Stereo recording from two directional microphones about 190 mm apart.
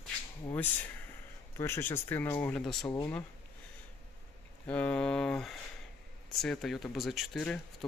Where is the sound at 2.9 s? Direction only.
15° left (ahead or behind).